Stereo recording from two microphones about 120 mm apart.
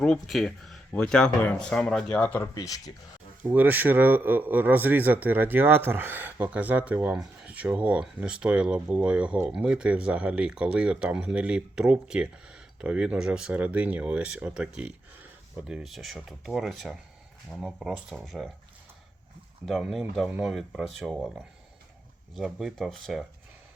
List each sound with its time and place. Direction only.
0.0 s speech: 5° left (ahead or behind)
2.6 s speech: 30° left (ahead or behind)
3.4 s speech: 15° right (ahead or behind)
19.6 s speech: centre (ahead or behind)
22.4 s speech: 5° right (ahead or behind)